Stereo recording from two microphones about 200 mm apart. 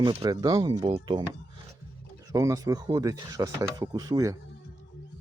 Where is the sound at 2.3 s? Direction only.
15° right (ahead or behind).